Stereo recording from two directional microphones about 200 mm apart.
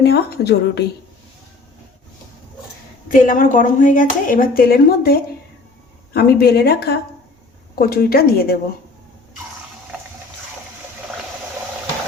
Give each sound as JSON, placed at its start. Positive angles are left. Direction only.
{"t": 0.0, "sound": "speech", "side_deg": 55}
{"t": 3.1, "sound": "speech", "side_deg": 40}